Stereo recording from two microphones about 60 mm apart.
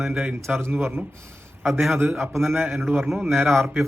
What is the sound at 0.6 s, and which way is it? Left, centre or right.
Speech, right.